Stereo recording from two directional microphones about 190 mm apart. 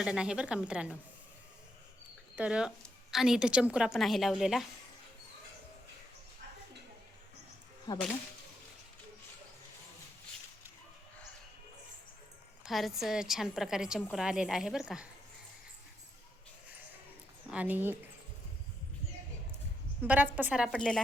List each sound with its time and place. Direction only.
0.0 s a woman's voice: 5° right (ahead or behind)
2.3 s a woman's voice: 5° right (ahead or behind)
7.9 s speech: 20° left (ahead or behind)
12.6 s a woman's voice: centre (ahead or behind)
17.5 s speech: 10° right (ahead or behind)
20.0 s a woman's voice: 10° right (ahead or behind)